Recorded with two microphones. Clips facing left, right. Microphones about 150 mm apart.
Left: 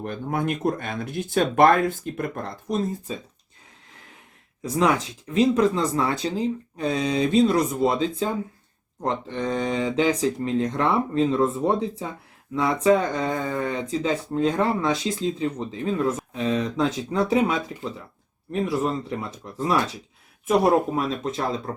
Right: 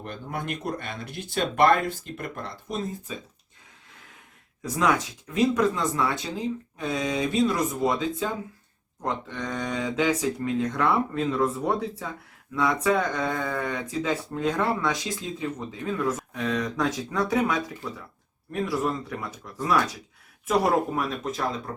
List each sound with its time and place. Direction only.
0.0 s speech: 50° left (ahead or behind)
4.6 s speech: 30° left (ahead or behind)
13.4 s speech: 15° left (ahead or behind)
13.7 s speech: 25° left (ahead or behind)